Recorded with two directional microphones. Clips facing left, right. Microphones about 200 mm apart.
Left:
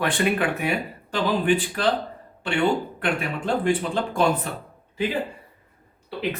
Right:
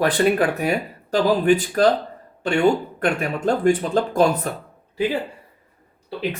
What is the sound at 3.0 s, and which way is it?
Speech, 45° right (ahead or behind).